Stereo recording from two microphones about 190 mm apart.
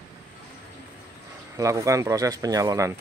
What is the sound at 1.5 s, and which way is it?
Speech, 15° right (ahead or behind).